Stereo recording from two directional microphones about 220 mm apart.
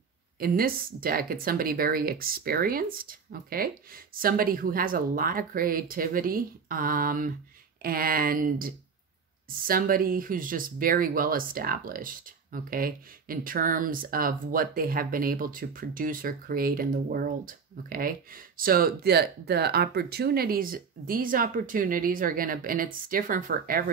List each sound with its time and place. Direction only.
0.4 s speech: 40° right (ahead or behind)